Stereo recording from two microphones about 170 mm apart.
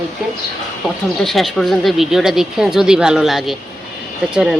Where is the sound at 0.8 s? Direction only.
Centre (ahead or behind).